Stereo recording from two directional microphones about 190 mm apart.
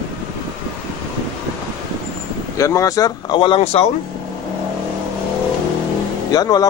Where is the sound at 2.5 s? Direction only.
15° left (ahead or behind); by 3.8 s 35° left (ahead or behind).